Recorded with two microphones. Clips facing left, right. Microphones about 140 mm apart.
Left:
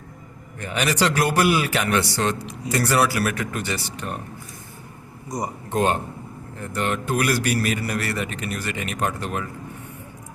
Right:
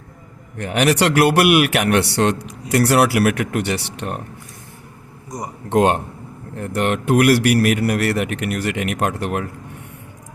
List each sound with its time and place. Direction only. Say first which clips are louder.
0.6 s a man's voice: right 5 dB; 70° right (ahead or behind)
5.6 s a man's voice: right 7 dB; 75° right (ahead or behind)